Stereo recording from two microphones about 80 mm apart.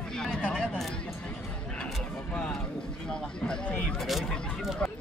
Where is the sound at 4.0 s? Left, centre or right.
Centre.